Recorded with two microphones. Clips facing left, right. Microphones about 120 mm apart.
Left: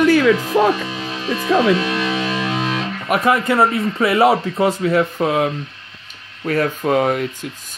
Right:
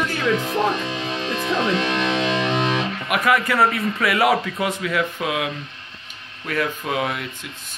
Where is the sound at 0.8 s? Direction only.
5° left (ahead or behind).